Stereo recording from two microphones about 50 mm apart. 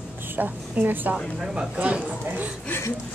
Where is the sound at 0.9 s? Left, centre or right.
Right.